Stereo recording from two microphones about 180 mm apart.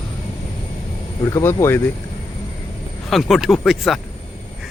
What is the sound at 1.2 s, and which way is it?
Speech, 20° left (ahead or behind).